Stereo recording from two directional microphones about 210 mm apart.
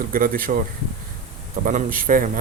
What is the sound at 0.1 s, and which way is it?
Speech, 45° right (ahead or behind).